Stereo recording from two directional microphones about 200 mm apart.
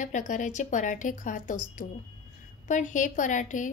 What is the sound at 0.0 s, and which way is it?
A woman's voice, 40° left (ahead or behind).